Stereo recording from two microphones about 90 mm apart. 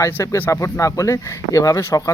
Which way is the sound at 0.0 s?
30° left (ahead or behind).